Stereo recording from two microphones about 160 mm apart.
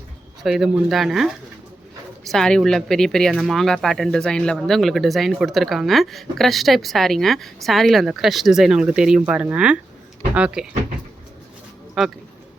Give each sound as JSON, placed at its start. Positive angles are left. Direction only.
{"t": 0.4, "sound": "speech", "side_deg": 0}
{"t": 12.0, "sound": "speech", "side_deg": 0}